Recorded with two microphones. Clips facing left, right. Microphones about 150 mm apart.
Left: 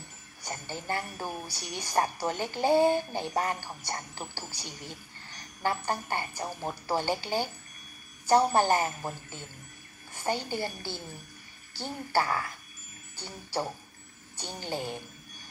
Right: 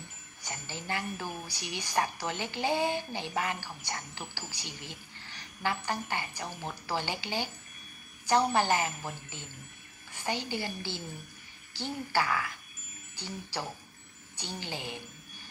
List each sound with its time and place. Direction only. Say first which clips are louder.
0.5 s speech: left 3 dB; 45° left (ahead or behind)